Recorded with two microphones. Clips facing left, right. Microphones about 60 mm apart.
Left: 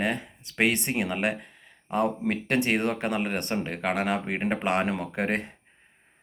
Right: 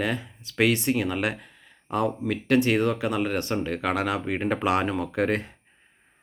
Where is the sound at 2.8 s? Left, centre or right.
Left.